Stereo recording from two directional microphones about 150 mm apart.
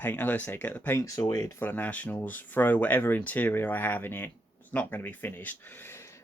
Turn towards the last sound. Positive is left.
turn(degrees=15)  # may be behind; listen again after turning